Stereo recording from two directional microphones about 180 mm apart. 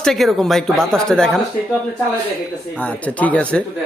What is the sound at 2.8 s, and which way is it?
Speech, 10° left (ahead or behind).